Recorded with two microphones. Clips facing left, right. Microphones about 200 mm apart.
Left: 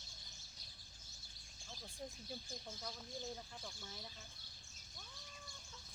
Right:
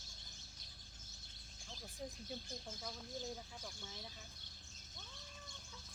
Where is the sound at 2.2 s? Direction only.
Centre (ahead or behind).